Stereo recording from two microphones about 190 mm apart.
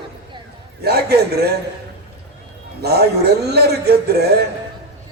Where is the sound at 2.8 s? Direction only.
55° right (ahead or behind).